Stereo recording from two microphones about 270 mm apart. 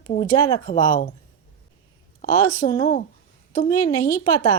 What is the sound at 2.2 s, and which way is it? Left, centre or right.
Speech, left.